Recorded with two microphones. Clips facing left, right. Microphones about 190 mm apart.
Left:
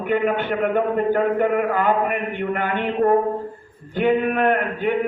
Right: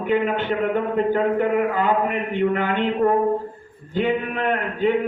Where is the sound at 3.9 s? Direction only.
55° left (ahead or behind).